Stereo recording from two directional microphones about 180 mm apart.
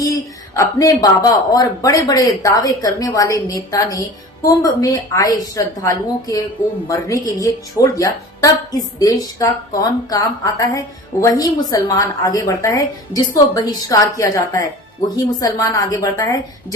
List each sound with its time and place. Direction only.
0.6 s speech: 20° left (ahead or behind)